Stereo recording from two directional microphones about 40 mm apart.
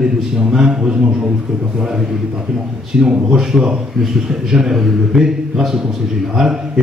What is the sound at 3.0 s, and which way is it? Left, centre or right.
A man's voice, centre.